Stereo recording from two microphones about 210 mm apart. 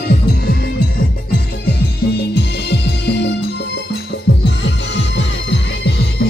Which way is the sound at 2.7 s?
55° left (ahead or behind).